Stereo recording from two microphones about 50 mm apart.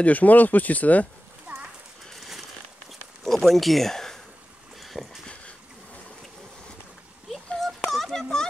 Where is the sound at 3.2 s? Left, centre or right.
Centre.